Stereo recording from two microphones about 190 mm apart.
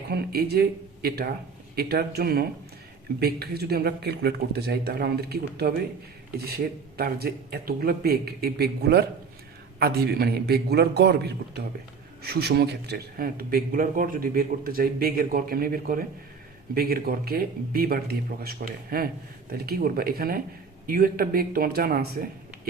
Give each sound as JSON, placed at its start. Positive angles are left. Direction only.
{"t": 0.1, "sound": "speech", "side_deg": -55}